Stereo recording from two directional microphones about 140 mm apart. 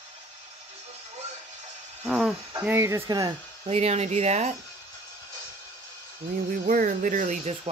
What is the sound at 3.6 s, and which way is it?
Speech, 50° right (ahead or behind).